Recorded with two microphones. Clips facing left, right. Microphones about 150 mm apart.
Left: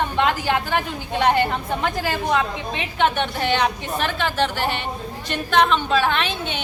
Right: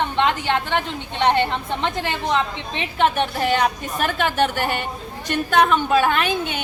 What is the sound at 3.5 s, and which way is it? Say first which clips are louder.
A woman's voice: right 1 dB; 45° right (ahead or behind).